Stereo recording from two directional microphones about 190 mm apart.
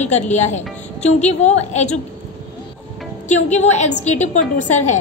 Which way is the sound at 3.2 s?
35° left (ahead or behind).